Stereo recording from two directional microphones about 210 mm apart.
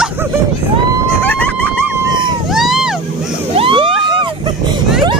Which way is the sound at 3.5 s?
25° right (ahead or behind).